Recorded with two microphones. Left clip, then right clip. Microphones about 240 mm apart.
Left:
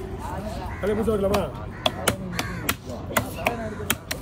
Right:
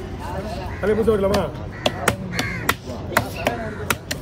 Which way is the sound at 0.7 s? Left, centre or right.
Right.